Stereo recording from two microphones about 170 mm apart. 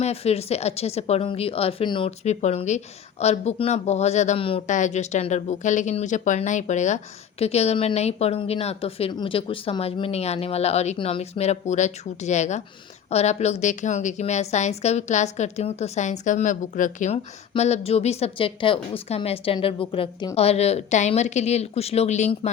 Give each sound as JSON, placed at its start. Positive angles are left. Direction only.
{"t": 0.0, "sound": "speech", "side_deg": 35}
{"t": 4.6, "sound": "a woman's voice", "side_deg": 45}